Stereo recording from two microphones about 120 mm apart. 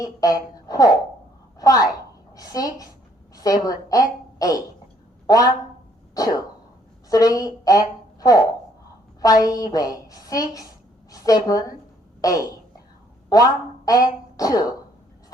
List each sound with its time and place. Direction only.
0.0 s speech: 30° left (ahead or behind)
1.5 s a sound: 30° left (ahead or behind)
3.3 s a woman's voice: 30° left (ahead or behind)
6.1 s cough: 30° left (ahead or behind)
7.1 s a woman's voice: 30° left (ahead or behind)